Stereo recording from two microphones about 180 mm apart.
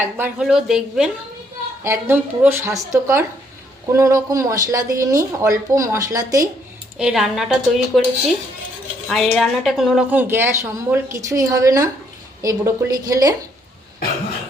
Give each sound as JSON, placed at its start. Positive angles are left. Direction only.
{"t": 0.2, "sound": "a woman's voice", "side_deg": -5}
{"t": 7.0, "sound": "a woman's voice", "side_deg": 0}
{"t": 9.0, "sound": "a woman's voice", "side_deg": 0}